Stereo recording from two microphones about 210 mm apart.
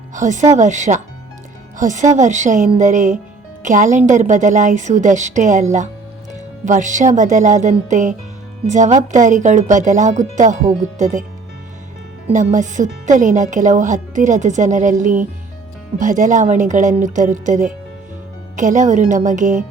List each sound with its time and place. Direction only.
0.1 s speech: 35° right (ahead or behind)
6.7 s speech: 35° right (ahead or behind)
12.3 s speech: 35° right (ahead or behind)